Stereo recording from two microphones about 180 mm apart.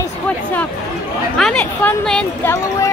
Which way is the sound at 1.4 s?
5° left (ahead or behind).